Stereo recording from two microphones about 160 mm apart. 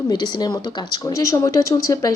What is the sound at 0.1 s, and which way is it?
Speech, 25° left (ahead or behind).